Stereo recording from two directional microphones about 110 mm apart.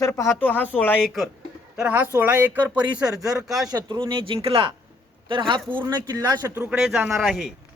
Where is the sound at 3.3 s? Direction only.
30° right (ahead or behind).